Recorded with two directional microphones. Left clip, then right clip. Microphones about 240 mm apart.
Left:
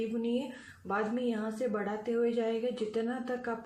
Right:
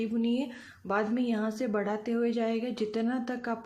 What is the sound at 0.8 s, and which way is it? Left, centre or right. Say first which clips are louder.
A woman's voice: right 3 dB; right.